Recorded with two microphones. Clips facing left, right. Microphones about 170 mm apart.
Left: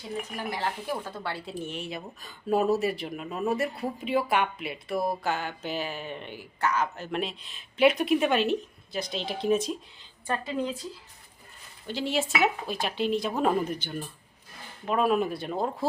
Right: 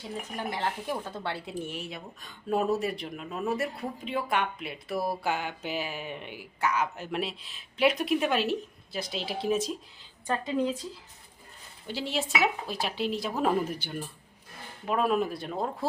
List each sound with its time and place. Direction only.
0.3 s speech: 20° right (ahead or behind)
1.6 s speech: 5° right (ahead or behind)
11.9 s speech: centre (ahead or behind)
14.8 s speech: centre (ahead or behind)